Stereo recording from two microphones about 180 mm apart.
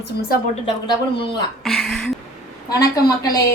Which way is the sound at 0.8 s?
25° left (ahead or behind).